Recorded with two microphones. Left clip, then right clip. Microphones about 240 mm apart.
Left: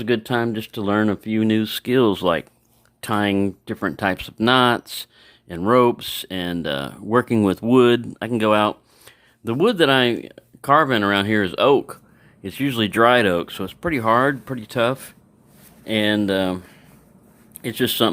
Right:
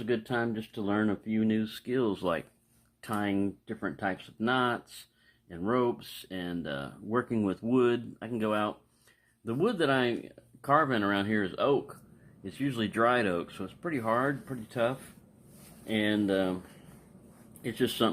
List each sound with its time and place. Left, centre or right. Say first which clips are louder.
0.0 s speech: left 10 dB; left
3.0 s speech: left 11 dB; left
17.6 s speech: left 9 dB; left